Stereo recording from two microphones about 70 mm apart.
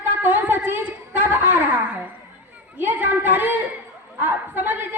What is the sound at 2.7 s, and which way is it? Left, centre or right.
A woman's voice, right.